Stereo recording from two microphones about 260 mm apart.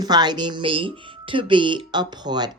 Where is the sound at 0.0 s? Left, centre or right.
Centre.